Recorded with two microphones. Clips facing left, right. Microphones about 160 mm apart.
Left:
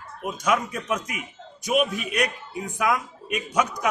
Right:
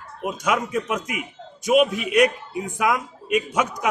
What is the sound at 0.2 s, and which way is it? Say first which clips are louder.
A man's voice: right 1 dB; 20° right (ahead or behind).